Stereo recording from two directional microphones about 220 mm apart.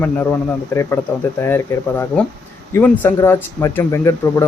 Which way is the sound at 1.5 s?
10° left (ahead or behind).